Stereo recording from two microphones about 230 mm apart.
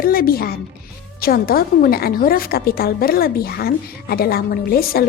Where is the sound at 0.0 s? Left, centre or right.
Left.